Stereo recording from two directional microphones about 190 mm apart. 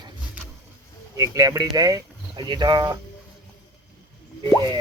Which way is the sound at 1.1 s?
15° right (ahead or behind).